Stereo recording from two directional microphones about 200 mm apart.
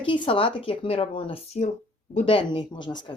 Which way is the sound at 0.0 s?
25° left (ahead or behind).